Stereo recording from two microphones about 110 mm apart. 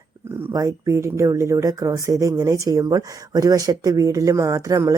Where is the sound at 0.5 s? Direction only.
30° right (ahead or behind).